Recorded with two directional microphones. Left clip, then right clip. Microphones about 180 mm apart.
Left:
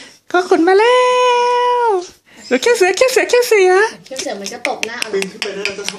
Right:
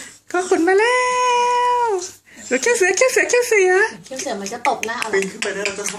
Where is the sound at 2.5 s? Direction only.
25° left (ahead or behind).